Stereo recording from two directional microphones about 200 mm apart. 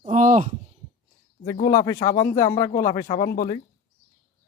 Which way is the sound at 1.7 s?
15° left (ahead or behind).